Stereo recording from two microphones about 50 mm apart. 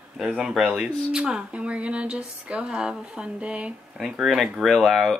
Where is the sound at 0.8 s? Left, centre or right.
Centre.